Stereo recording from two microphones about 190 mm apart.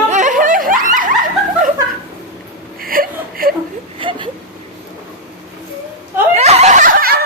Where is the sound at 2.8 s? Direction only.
50° right (ahead or behind).